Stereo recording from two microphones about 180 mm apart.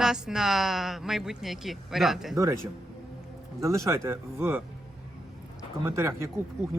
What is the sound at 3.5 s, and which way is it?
A man's voice, 15° right (ahead or behind).